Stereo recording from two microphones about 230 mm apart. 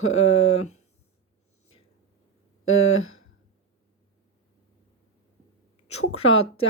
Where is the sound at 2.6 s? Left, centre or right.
Left.